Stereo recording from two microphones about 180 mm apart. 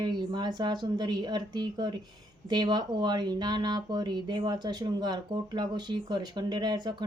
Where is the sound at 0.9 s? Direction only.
25° right (ahead or behind).